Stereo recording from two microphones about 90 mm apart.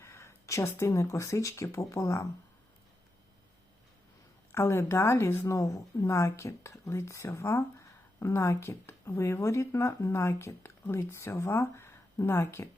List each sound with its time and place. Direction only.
0.0 s speech: 30° left (ahead or behind)
4.5 s speech: 30° left (ahead or behind)